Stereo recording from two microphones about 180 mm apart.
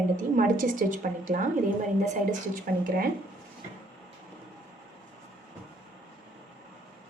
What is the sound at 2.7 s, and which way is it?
Speech, 55° right (ahead or behind).